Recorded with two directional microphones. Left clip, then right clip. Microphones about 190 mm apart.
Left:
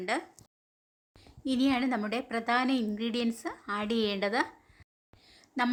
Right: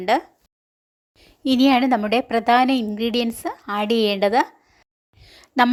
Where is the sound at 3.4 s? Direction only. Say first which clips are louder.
Right 10 dB; 30° right (ahead or behind).